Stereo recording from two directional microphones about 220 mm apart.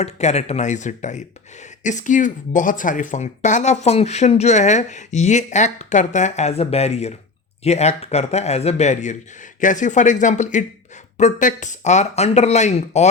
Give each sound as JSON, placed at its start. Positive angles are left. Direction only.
{"t": 0.0, "sound": "speech", "side_deg": 30}